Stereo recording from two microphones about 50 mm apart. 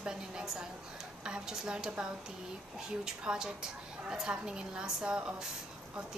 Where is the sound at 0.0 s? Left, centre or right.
Centre.